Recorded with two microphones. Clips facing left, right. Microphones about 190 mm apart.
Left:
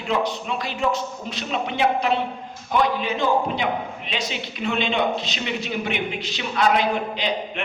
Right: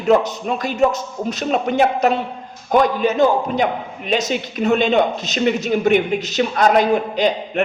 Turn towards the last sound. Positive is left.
turn(degrees=-45)  # may be behind; listen again after turning